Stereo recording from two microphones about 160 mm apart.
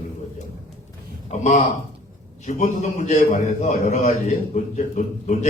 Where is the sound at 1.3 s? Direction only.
45° left (ahead or behind).